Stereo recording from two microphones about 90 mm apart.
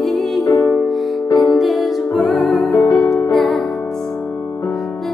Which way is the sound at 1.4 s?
Centre (ahead or behind).